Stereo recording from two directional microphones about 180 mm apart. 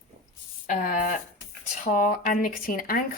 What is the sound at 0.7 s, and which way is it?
A woman's voice, 50° left (ahead or behind).